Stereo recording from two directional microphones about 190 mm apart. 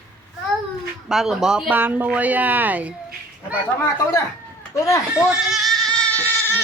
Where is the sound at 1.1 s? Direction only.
Centre (ahead or behind).